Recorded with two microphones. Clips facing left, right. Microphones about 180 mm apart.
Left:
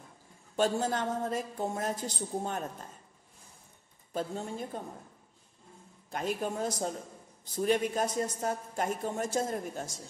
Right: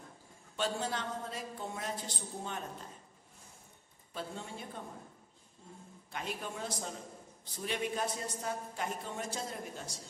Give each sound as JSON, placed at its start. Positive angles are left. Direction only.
{"t": 0.6, "sound": "a woman's voice", "side_deg": 45}
{"t": 4.1, "sound": "a woman's voice", "side_deg": 45}
{"t": 6.0, "sound": "a woman's voice", "side_deg": 40}